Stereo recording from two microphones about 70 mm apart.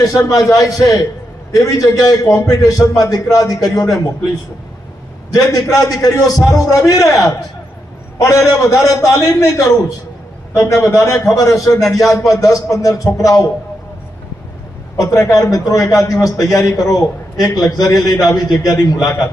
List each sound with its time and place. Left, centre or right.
0.0 s a man's voice: left
5.3 s a man's voice: left
8.4 s a man's voice: left
10.5 s a man's voice: left
11.8 s speech: centre
12.3 s a man's voice: left
14.9 s a man's voice: left